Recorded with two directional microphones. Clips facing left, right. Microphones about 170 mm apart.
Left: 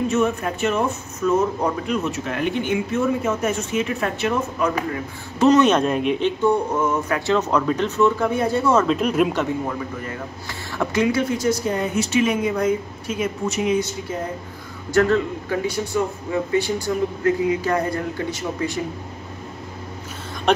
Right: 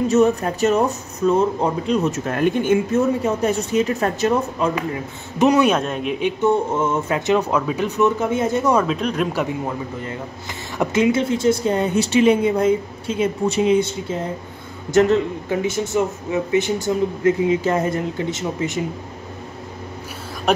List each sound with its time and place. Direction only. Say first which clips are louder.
0.1 s speech: right 5 dB; 35° right (ahead or behind)
2.0 s speech: right 4 dB; 45° right (ahead or behind); by 5.5 s 25° right (ahead or behind)
5.5 s speech: left 3 dB; 10° right (ahead or behind)
6.2 s speech: right 4 dB; 20° right (ahead or behind)
8.8 s speech: left 3 dB; 5° left (ahead or behind)
10.8 s speech: right 2 dB; 20° right (ahead or behind)
14.9 s speech: right 2 dB; 20° right (ahead or behind)
20.5 s speech: even; 5° right (ahead or behind)